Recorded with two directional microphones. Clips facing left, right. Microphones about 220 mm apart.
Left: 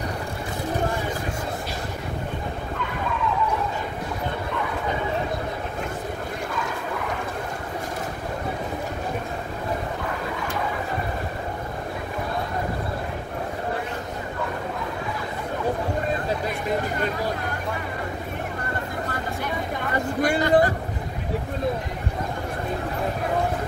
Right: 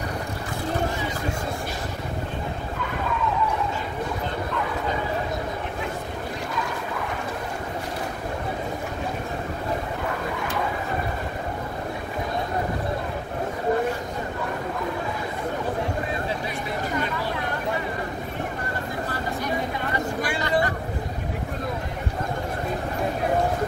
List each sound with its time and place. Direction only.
20.2 s vehicle: 45° left (ahead or behind)